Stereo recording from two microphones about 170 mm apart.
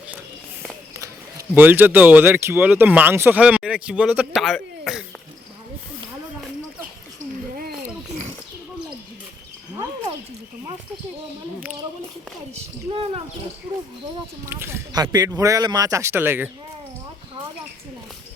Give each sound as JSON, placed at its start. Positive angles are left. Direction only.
{"t": 0.9, "sound": "speech", "side_deg": -15}
{"t": 12.9, "sound": "speech", "side_deg": -35}
{"t": 14.4, "sound": "speech", "side_deg": -15}